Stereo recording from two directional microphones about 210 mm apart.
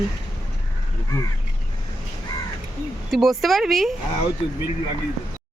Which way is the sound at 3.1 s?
Centre (ahead or behind).